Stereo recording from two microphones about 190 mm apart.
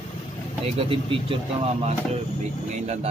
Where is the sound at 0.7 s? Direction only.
30° right (ahead or behind).